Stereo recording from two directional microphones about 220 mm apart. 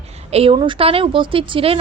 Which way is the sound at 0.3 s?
25° right (ahead or behind).